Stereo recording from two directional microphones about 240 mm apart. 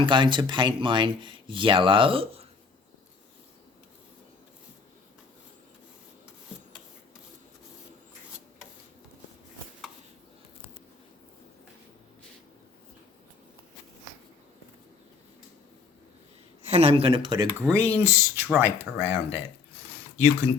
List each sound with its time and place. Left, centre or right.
0.0 s speech: centre
16.6 s speech: right